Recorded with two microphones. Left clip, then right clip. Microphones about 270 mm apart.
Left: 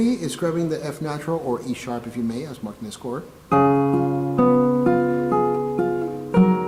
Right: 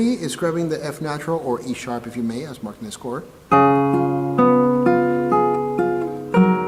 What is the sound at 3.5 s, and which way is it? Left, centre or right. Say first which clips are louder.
Music: right 3 dB; centre.